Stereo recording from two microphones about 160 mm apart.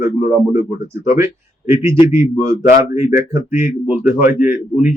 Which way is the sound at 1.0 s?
15° right (ahead or behind).